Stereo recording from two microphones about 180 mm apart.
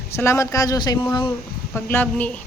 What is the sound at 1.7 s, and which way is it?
Speech, 10° left (ahead or behind).